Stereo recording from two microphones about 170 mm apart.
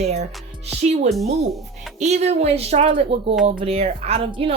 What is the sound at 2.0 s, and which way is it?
Speech, 40° right (ahead or behind).